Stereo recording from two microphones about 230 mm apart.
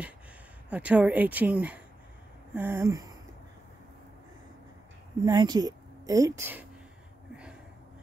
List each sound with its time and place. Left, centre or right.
0.7 s speech: centre
2.5 s a sound: centre
5.2 s a woman's voice: centre